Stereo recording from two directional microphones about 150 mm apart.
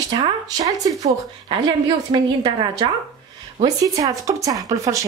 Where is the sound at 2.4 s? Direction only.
35° right (ahead or behind).